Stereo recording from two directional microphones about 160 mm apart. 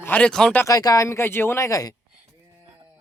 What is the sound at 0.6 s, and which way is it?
Speech, 20° left (ahead or behind).